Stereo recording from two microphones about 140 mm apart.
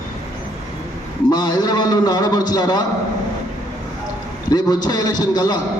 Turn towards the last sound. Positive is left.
turn(degrees=30)  # may be behind; listen again after turning